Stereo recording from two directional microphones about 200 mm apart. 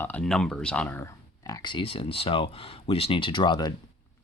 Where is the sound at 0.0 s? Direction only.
5° left (ahead or behind).